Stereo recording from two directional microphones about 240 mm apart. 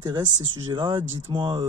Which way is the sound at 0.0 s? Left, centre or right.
Centre.